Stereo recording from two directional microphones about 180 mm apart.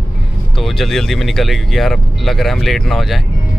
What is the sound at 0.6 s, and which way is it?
Speech, centre (ahead or behind).